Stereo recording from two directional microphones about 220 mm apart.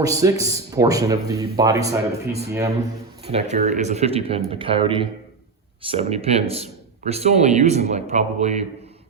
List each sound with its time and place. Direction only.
0.0 s speech: 15° right (ahead or behind)
3.2 s speech: 30° right (ahead or behind)